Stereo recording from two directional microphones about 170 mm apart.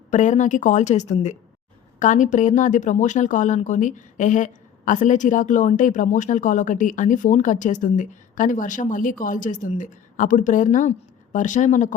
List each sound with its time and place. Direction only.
0.1 s speech: 45° left (ahead or behind)